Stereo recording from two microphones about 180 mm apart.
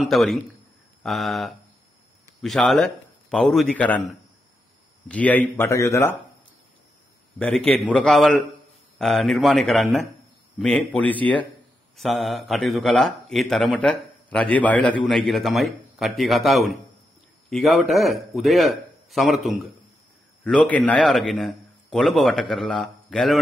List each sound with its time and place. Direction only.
0.0 s a man's voice: centre (ahead or behind)
7.3 s a man's voice: 5° left (ahead or behind)